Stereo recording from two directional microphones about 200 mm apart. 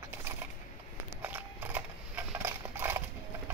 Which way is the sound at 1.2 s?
10° right (ahead or behind).